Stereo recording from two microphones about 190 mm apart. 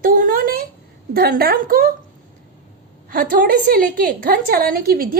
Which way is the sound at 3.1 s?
50° right (ahead or behind).